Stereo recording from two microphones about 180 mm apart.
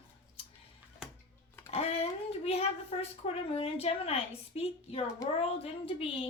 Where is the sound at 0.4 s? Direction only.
30° left (ahead or behind).